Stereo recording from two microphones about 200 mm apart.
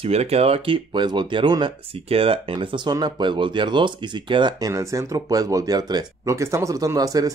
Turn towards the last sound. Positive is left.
turn(degrees=-15)  # may be behind; listen again after turning